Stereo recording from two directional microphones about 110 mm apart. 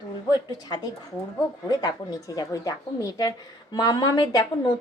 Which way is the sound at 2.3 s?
30° left (ahead or behind).